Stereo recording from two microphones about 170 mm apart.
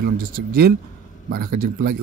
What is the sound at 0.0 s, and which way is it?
Speech, 60° right (ahead or behind).